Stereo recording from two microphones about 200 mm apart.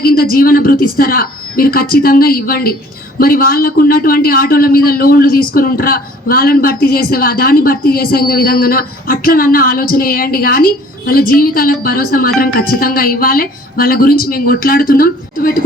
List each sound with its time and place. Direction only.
0.0 s a man's voice: 45° left (ahead or behind)